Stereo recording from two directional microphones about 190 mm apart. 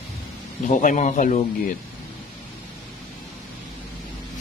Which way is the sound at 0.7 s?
40° left (ahead or behind).